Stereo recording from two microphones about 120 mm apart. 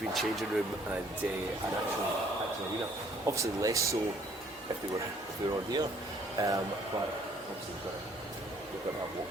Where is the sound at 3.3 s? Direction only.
25° right (ahead or behind).